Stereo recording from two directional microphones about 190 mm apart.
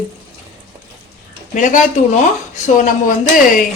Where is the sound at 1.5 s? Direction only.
45° left (ahead or behind).